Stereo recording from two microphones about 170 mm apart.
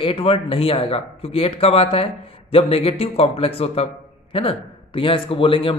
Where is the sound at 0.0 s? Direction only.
35° left (ahead or behind).